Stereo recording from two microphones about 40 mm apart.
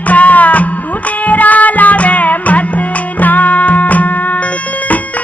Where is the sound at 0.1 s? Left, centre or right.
Left.